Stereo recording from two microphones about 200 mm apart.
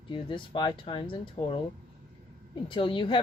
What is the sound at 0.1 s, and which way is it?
Speech, 25° left (ahead or behind).